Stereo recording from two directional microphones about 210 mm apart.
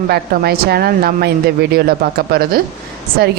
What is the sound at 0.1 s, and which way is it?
Speech, 50° right (ahead or behind).